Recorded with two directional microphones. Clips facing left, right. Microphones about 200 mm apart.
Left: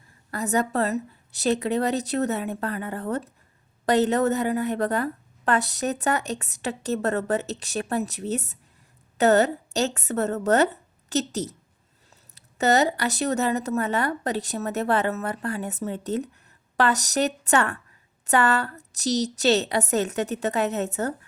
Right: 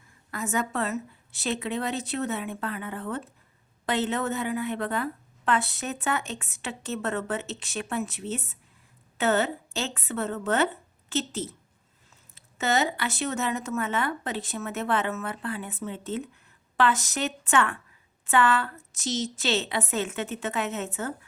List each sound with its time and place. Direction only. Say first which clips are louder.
0.3 s speech: left 5 dB; 35° left (ahead or behind)